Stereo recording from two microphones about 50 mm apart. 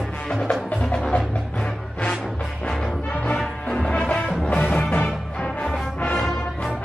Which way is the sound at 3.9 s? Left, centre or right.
Left.